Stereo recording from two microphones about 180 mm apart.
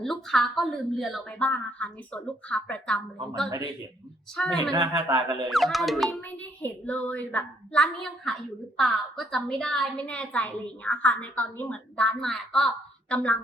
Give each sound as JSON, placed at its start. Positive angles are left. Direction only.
{"t": 0.0, "sound": "speech", "side_deg": 0}
{"t": 4.4, "sound": "speech", "side_deg": 5}
{"t": 4.7, "sound": "speech", "side_deg": -25}
{"t": 5.5, "sound": "a woman's voice", "side_deg": 0}